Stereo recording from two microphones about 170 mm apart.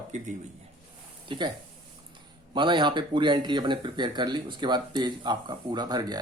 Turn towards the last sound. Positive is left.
turn(degrees=-25)  # may be behind; listen again after turning